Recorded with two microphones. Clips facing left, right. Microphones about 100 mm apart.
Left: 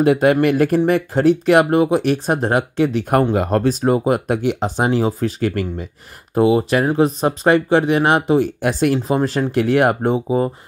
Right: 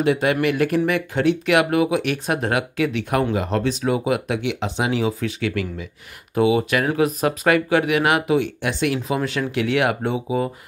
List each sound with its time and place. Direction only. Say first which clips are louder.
0.0 s speech: left 5 dB; 45° left (ahead or behind)